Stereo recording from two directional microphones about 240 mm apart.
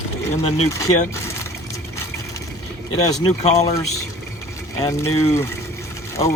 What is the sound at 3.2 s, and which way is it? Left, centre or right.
Speech, left.